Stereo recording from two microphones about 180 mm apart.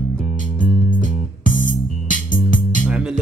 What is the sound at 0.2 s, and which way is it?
Music, 40° right (ahead or behind).